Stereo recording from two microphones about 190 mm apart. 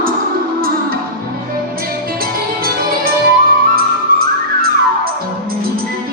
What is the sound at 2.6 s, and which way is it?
Music, 50° right (ahead or behind).